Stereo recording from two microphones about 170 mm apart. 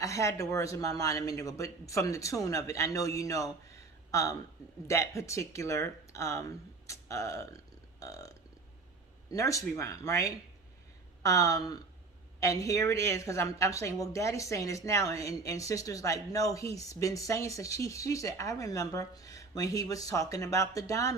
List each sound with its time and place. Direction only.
0.0 s a woman's voice: 20° left (ahead or behind)
9.3 s a woman's voice: 20° left (ahead or behind)